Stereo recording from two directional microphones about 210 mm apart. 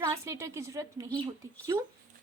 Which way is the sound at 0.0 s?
15° right (ahead or behind).